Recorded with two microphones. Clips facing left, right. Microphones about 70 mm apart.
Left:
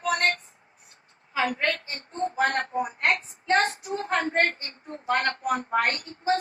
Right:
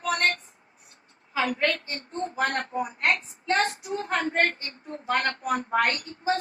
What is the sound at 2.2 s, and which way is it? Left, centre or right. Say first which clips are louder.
A woman's voice: left 2 dB; left.